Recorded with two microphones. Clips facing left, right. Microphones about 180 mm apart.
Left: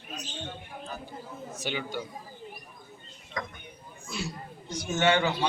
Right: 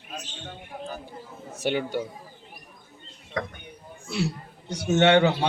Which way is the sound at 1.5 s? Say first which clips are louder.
Right 8 dB; 65° right (ahead or behind).